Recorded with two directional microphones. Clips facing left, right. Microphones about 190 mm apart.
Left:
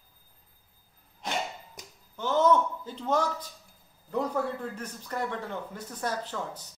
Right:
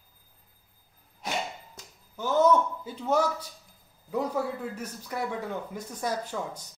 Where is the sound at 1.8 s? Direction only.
15° left (ahead or behind).